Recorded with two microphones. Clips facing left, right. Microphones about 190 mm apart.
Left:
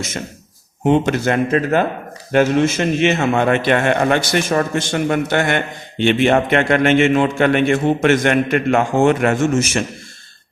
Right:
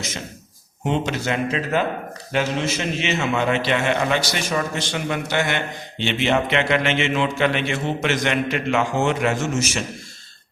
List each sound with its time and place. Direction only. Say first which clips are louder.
0.9 s a man's voice: left 8 dB; 55° left (ahead or behind)